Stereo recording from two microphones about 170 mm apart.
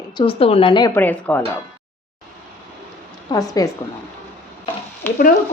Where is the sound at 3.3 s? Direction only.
25° left (ahead or behind).